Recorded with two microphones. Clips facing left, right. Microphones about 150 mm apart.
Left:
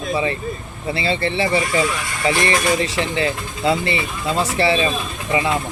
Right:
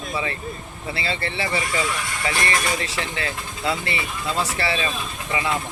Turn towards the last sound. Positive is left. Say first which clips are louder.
# left 5 dB
turn(degrees=25)  # may be behind; listen again after turning